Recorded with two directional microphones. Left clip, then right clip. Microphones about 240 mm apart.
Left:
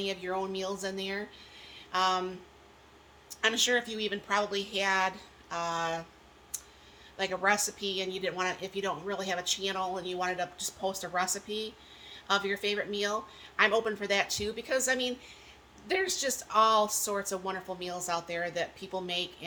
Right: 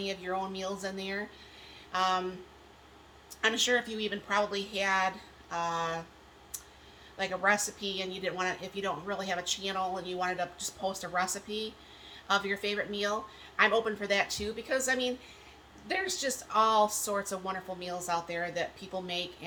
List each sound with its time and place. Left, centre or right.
0.0 s a woman's voice: centre
3.4 s a woman's voice: centre
6.5 s clicking: centre
7.2 s a woman's voice: centre